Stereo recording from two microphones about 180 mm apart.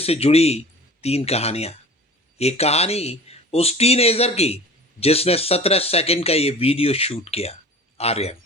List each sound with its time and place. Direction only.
0.0 s a man's voice: 35° left (ahead or behind)